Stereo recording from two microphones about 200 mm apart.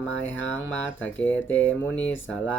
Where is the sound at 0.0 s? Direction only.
5° left (ahead or behind).